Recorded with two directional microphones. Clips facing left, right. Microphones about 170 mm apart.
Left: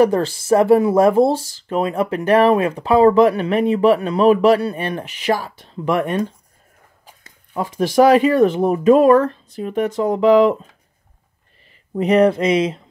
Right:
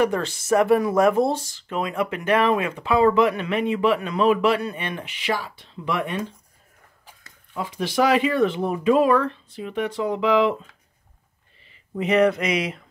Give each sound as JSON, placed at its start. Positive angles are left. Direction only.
{"t": 0.0, "sound": "speech", "side_deg": 30}
{"t": 7.5, "sound": "speech", "side_deg": 45}
{"t": 11.9, "sound": "a sound", "side_deg": 35}